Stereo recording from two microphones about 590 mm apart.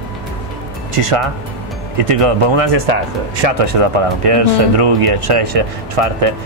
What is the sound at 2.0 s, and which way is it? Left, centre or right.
Speech, right.